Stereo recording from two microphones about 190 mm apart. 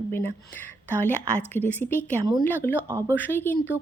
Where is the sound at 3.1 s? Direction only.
10° left (ahead or behind).